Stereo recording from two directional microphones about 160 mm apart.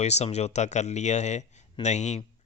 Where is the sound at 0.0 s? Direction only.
45° left (ahead or behind).